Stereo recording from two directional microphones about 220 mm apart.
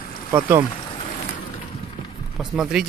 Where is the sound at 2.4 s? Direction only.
5° right (ahead or behind).